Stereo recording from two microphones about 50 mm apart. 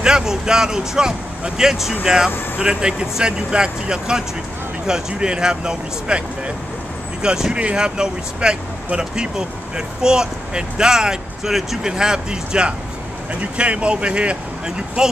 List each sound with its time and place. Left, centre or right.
0.0 s speech: centre